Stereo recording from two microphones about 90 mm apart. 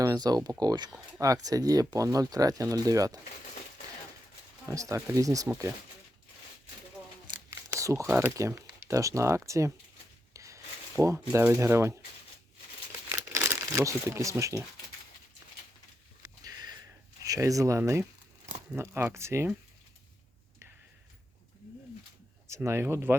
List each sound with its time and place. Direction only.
0.0 s speech: 45° right (ahead or behind)
4.7 s speech: 40° right (ahead or behind)
7.8 s a sound: 35° right (ahead or behind)
8.0 s speech: 20° right (ahead or behind)
8.4 s speech: 30° right (ahead or behind)
10.3 s a sound: 35° right (ahead or behind)
11.0 s speech: 35° right (ahead or behind)
13.1 s crumpling: 30° right (ahead or behind)
16.2 s sniff: 45° right (ahead or behind)
17.2 s speech: 40° right (ahead or behind)
22.4 s speech: 30° right (ahead or behind)